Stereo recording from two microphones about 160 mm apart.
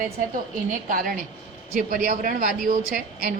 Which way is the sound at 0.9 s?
60° right (ahead or behind).